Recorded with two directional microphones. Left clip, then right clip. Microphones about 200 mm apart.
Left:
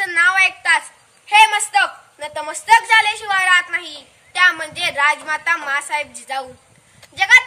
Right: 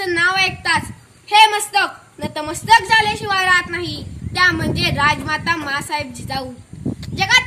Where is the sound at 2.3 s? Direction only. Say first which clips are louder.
Even; 20° left (ahead or behind).